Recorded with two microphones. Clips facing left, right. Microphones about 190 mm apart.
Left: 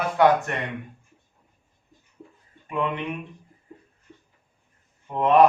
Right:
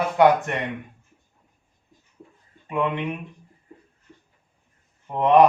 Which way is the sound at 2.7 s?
20° right (ahead or behind).